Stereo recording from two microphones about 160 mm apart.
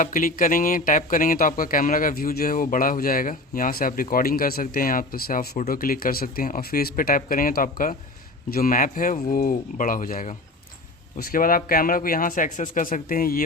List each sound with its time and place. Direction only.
0.0 s speech: 55° left (ahead or behind)